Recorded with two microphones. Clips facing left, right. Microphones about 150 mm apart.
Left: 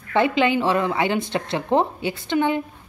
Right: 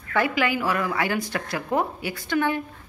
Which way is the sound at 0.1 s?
25° left (ahead or behind).